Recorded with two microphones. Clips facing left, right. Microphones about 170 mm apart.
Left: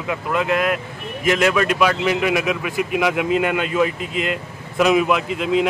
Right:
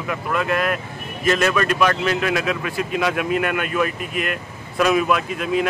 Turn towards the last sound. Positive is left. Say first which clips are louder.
# left 2 dB
turn(degrees=20)  # may be behind; listen again after turning